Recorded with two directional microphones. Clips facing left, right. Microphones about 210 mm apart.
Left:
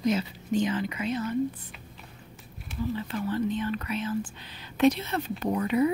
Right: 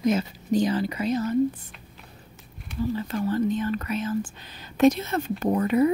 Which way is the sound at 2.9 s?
40° right (ahead or behind).